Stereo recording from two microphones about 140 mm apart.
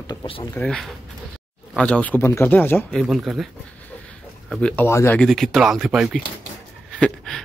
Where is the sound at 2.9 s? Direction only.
Centre (ahead or behind).